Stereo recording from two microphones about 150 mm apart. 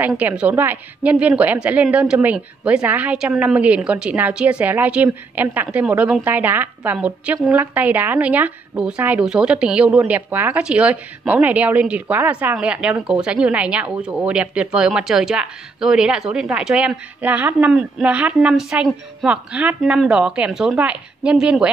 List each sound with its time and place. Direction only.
0.0 s a woman's voice: 10° right (ahead or behind)